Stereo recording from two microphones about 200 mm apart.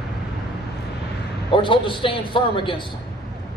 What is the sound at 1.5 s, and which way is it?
Speech, 25° left (ahead or behind).